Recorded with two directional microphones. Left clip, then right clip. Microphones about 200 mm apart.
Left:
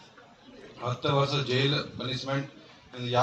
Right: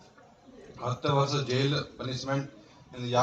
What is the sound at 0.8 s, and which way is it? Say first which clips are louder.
A man's voice: left 1 dB; 5° right (ahead or behind).